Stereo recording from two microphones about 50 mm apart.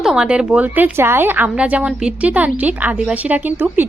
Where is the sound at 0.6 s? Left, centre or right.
Right.